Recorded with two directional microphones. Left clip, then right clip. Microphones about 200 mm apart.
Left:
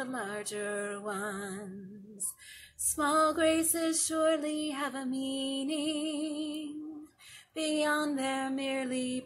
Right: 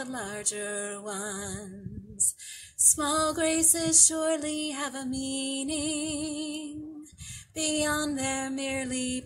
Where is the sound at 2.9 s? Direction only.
15° right (ahead or behind).